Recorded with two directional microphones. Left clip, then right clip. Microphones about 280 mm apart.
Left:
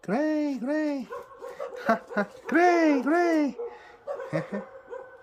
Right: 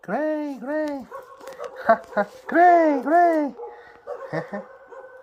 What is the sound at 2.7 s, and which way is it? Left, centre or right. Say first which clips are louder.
Speech: right 6 dB; left.